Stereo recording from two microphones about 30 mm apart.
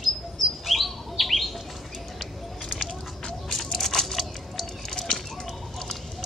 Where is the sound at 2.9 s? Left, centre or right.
Left.